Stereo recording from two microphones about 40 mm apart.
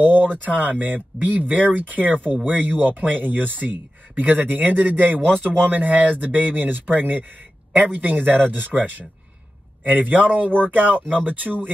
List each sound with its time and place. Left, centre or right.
0.0 s speech: right
5.2 s speech: left
5.6 s speech: right